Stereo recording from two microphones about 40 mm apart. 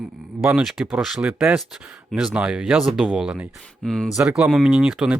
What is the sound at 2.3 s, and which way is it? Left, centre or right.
Speech, right.